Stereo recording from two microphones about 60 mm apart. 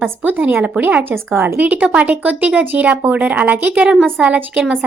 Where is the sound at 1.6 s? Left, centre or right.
Right.